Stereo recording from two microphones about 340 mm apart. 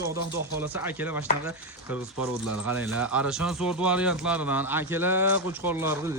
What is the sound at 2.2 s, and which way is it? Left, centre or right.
Speech, left.